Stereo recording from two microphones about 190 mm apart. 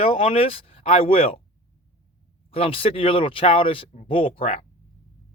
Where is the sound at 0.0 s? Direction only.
30° left (ahead or behind).